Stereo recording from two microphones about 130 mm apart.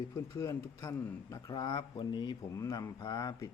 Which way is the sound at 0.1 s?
25° left (ahead or behind).